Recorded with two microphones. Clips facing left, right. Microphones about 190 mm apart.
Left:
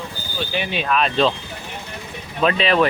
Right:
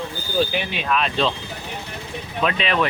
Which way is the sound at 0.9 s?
45° left (ahead or behind).